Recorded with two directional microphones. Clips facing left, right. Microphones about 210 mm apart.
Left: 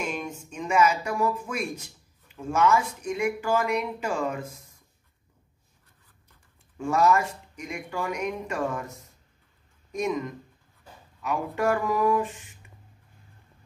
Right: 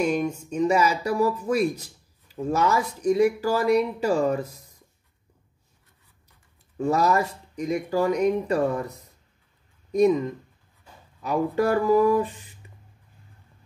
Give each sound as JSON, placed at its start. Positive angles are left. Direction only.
{"t": 0.0, "sound": "speech", "side_deg": -40}
{"t": 6.8, "sound": "speech", "side_deg": -35}